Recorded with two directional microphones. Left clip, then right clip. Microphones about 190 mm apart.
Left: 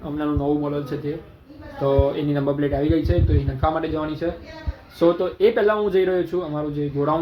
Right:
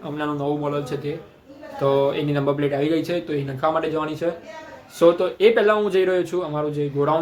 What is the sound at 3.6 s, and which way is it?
Speech, 20° right (ahead or behind).